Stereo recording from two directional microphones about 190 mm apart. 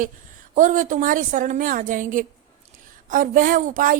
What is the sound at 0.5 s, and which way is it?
Speech, 40° right (ahead or behind).